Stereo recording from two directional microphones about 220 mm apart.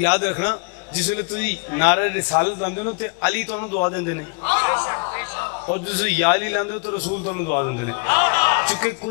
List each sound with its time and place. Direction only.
0.0 s a man's voice: 15° left (ahead or behind)
3.5 s a man's voice: 25° left (ahead or behind)
7.1 s a man's voice: 35° left (ahead or behind)
7.5 s a man's voice: 15° left (ahead or behind)